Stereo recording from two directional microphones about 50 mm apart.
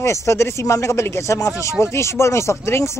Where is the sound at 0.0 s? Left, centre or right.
Left.